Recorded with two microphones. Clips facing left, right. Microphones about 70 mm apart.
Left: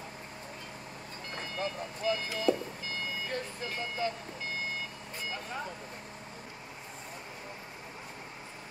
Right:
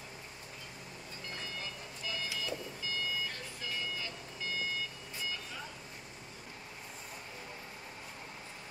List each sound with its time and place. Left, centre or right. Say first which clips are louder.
1.3 s vehicle: left 9 dB; left